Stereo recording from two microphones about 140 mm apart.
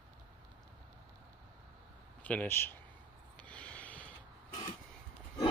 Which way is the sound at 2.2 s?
10° left (ahead or behind).